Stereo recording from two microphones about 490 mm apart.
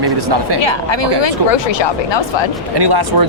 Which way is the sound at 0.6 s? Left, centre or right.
Left.